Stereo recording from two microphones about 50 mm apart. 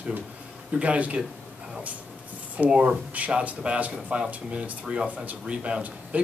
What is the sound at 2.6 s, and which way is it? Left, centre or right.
Speech, centre.